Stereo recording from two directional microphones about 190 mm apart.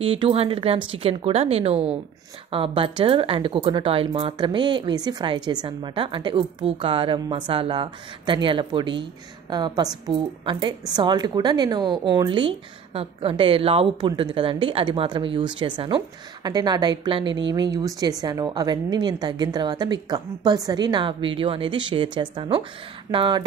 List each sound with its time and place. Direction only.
0.0 s speech: 30° right (ahead or behind)